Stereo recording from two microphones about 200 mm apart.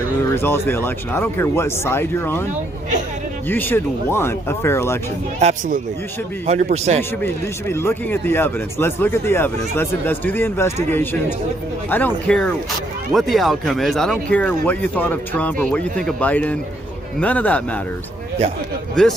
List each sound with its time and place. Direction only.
0.3 s speech: 10° left (ahead or behind)
3.5 s speech: 10° left (ahead or behind)
5.4 s a man's voice: 35° right (ahead or behind)
7.7 s speech: 10° left (ahead or behind)
19.0 s speech: 5° left (ahead or behind)